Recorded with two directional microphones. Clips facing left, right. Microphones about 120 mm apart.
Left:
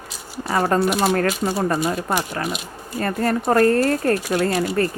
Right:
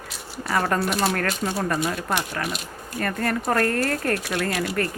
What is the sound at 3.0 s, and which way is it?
Speech, 30° left (ahead or behind).